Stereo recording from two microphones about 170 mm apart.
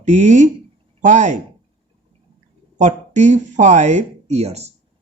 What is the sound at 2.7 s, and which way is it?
Speech, 45° right (ahead or behind).